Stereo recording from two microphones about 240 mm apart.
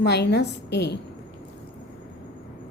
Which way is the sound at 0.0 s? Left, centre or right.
Left.